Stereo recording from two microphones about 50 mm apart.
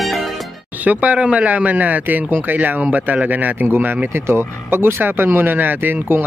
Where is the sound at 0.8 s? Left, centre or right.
Right.